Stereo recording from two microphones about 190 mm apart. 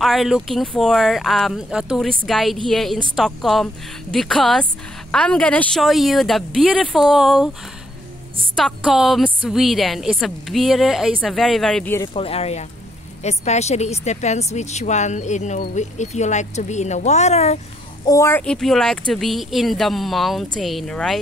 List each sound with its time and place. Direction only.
0.0 s a woman's voice: centre (ahead or behind)
8.5 s a woman's voice: centre (ahead or behind)
12.1 s a woman's voice: 30° left (ahead or behind)
18.0 s a woman's voice: 15° left (ahead or behind)